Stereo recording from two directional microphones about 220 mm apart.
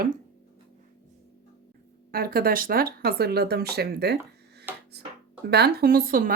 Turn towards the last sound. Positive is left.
turn(degrees=-40)  # may be behind; listen again after turning